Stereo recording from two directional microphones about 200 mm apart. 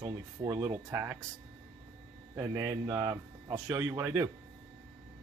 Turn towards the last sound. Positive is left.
turn(degrees=-15)  # may be behind; listen again after turning